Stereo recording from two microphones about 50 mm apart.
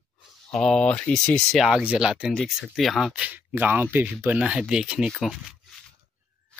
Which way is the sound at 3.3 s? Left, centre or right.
Right.